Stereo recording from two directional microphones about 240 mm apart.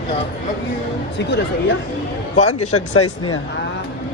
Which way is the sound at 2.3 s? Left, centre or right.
Left.